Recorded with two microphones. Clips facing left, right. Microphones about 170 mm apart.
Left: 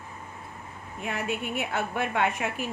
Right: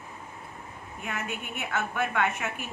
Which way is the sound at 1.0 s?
35° left (ahead or behind).